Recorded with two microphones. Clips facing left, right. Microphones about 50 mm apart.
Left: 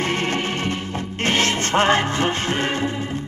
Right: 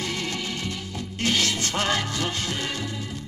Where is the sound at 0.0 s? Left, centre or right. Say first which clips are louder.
Left 7 dB; left.